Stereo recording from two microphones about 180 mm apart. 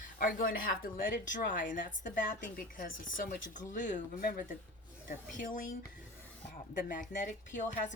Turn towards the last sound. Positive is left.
turn(degrees=45)  # may be behind; listen again after turning